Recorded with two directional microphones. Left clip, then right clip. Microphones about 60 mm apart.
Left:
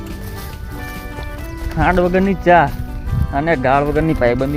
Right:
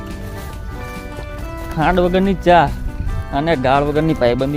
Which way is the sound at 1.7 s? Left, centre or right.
Right.